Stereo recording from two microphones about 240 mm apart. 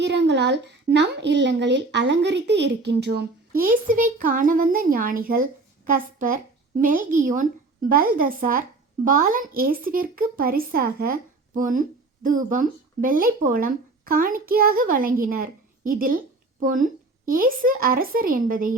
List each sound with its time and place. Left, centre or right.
0.0 s a woman's voice: right